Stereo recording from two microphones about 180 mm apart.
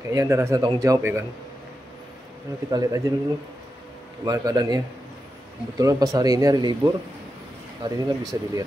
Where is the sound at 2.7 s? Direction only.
20° right (ahead or behind).